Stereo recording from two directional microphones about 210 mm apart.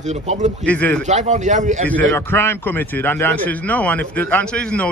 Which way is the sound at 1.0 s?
35° right (ahead or behind).